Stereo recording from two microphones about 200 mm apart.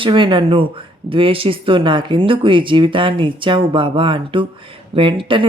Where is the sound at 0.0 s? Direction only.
25° right (ahead or behind).